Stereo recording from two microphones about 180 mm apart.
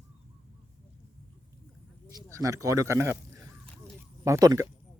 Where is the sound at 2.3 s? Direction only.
15° right (ahead or behind).